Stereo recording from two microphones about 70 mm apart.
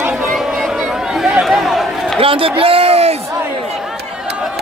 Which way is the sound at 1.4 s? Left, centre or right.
Centre.